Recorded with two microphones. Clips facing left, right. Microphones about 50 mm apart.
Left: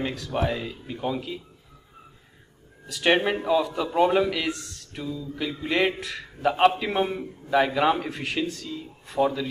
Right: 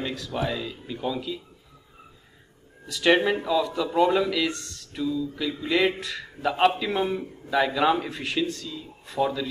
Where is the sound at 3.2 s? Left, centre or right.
Centre.